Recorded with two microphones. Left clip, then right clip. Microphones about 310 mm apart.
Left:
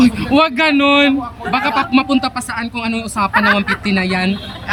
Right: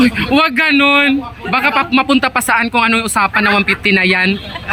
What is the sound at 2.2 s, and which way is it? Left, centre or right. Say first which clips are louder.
Speech: right 8 dB; centre.